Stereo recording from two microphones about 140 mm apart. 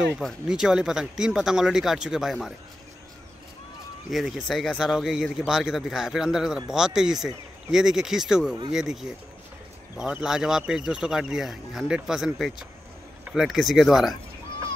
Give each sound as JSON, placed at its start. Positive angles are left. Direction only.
{"t": 0.1, "sound": "speech", "side_deg": 0}
{"t": 4.1, "sound": "speech", "side_deg": 0}